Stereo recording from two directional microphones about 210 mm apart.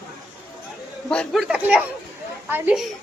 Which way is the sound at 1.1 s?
Centre (ahead or behind).